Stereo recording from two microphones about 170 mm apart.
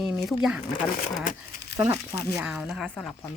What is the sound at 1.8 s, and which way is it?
Speech, 15° right (ahead or behind).